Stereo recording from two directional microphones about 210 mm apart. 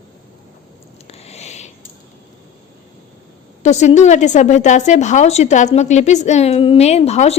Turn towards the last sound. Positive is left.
turn(degrees=30)  # may be behind; listen again after turning